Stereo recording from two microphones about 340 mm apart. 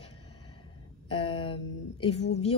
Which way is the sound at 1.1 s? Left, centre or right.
Centre.